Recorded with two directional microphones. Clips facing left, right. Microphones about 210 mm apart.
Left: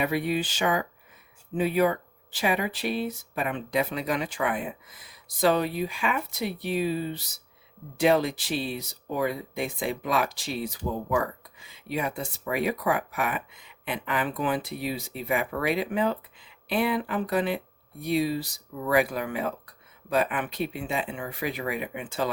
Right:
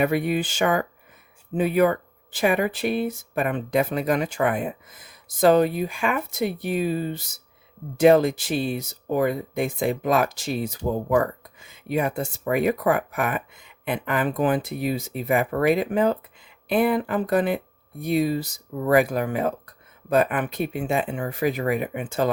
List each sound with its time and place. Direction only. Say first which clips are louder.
0.0 s speech: right 4 dB; 50° right (ahead or behind)